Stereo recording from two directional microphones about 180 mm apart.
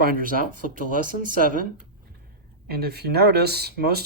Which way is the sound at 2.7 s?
60° right (ahead or behind).